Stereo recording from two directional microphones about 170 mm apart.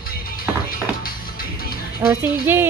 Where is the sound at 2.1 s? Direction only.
15° right (ahead or behind).